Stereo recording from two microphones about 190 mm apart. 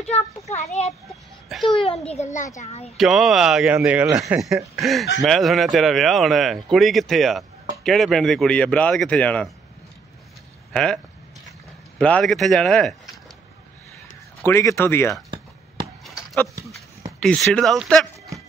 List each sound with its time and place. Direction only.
0.5 s a child's voice: 35° left (ahead or behind)
1.5 s speech: centre (ahead or behind)
1.8 s a child's voice: 30° left (ahead or behind)
3.0 s speech: centre (ahead or behind)
10.7 s speech: 5° left (ahead or behind)
12.0 s speech: 5° left (ahead or behind)
14.4 s speech: 15° left (ahead or behind)
16.0 s a sound: centre (ahead or behind)
17.2 s speech: 5° left (ahead or behind)